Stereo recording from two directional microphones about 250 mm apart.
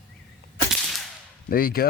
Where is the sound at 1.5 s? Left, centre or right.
Left.